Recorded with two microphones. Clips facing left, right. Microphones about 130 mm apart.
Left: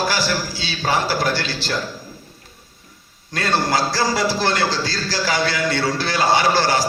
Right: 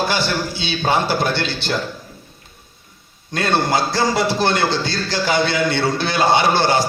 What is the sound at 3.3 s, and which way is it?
A man's voice, 25° right (ahead or behind).